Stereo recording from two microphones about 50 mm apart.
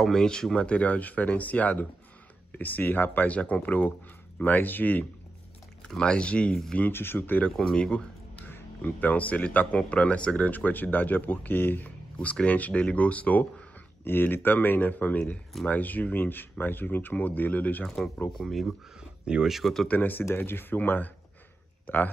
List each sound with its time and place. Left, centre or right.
0.0 s speech: centre
0.7 s speech: left
3.3 s speech: left
5.9 s speech: centre
6.9 s speech: left
7.5 s speech: centre
7.8 s speech: centre
8.4 s speech: left
12.2 s speech: left
14.0 s speech: left
17.8 s speech: centre
18.9 s a sound: centre
19.5 s speech: centre
20.0 s speech: left